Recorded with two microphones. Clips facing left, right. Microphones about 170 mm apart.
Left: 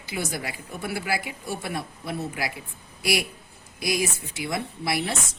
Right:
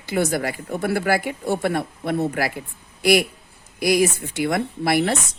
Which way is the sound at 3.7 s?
65° right (ahead or behind).